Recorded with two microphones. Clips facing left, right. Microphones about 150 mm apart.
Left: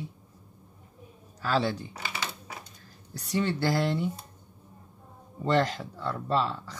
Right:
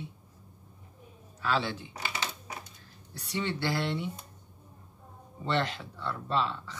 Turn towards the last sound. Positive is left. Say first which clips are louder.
# left 3 dB
turn(degrees=40)  # may be behind; listen again after turning